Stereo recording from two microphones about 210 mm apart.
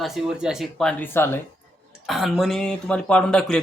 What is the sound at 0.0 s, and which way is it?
Speech, centre (ahead or behind).